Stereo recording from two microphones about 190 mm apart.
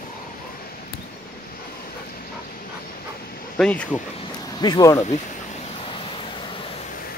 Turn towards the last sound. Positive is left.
turn(degrees=25)  # may be behind; listen again after turning